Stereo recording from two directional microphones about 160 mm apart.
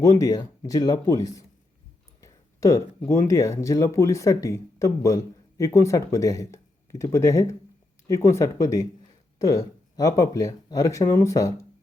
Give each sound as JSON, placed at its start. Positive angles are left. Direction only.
{"t": 0.0, "sound": "speech", "side_deg": 20}
{"t": 2.2, "sound": "a sound", "side_deg": 20}
{"t": 3.1, "sound": "speech", "side_deg": 20}